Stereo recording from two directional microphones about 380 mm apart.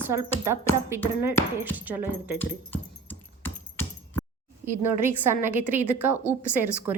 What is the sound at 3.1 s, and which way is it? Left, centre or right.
Keys jangling, centre.